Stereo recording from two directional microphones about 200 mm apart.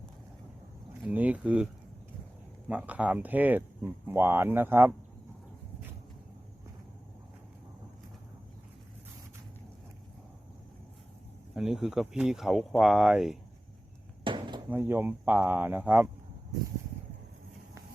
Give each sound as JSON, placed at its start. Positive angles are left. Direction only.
{"t": 1.0, "sound": "speech", "side_deg": -5}
{"t": 11.5, "sound": "speech", "side_deg": -5}
{"t": 14.3, "sound": "a sound", "side_deg": -25}
{"t": 14.7, "sound": "speech", "side_deg": -10}